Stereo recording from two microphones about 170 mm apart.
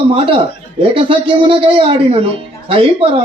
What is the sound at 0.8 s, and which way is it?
Speech, 30° right (ahead or behind).